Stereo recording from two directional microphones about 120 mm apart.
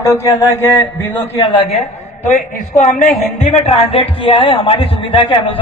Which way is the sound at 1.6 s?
70° left (ahead or behind).